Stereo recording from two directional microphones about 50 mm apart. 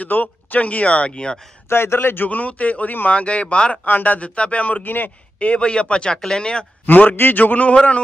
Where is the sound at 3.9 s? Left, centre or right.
Left.